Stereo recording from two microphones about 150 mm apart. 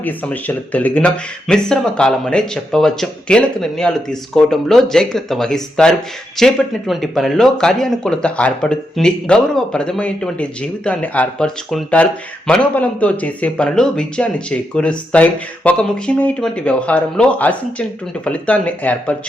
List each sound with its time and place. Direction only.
0.0 s speech: 10° left (ahead or behind)